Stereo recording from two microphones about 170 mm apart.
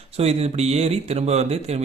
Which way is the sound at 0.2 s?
40° right (ahead or behind).